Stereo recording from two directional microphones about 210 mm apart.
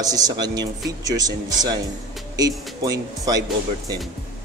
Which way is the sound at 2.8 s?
15° right (ahead or behind).